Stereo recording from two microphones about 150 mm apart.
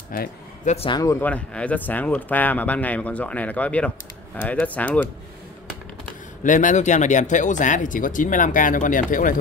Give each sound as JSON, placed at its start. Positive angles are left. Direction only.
{"t": 0.1, "sound": "speech", "side_deg": 70}
{"t": 0.8, "sound": "speech", "side_deg": 25}
{"t": 1.2, "sound": "speech", "side_deg": 10}
{"t": 6.4, "sound": "speech", "side_deg": 60}